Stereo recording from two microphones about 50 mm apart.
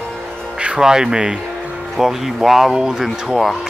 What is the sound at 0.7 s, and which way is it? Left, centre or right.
Speech, centre.